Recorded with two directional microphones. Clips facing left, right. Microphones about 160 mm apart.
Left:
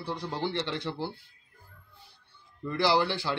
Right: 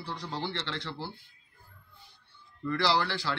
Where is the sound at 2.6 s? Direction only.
15° left (ahead or behind).